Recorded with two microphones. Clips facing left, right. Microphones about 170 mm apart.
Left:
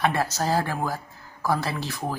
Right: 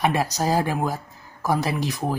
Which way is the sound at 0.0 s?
15° right (ahead or behind).